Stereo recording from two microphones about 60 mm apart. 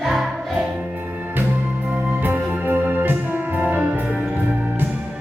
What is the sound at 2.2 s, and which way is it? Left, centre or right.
Music, right.